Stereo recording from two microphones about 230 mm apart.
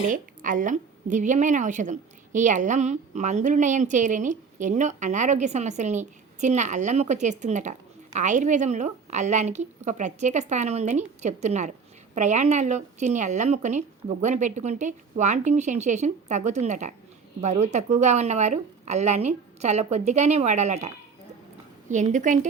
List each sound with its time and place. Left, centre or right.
0.1 s a woman's voice: right